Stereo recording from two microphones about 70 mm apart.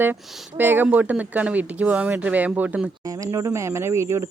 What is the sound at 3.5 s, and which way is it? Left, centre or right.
Speech, right.